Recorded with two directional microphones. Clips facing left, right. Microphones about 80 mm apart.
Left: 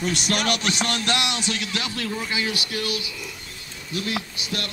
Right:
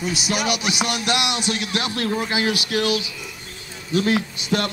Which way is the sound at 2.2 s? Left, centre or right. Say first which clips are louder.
Right 4 dB; right.